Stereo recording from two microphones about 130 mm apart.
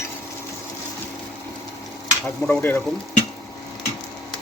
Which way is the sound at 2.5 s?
15° left (ahead or behind).